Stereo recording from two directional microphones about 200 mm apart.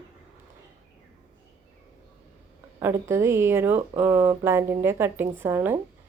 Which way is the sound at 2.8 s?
15° right (ahead or behind).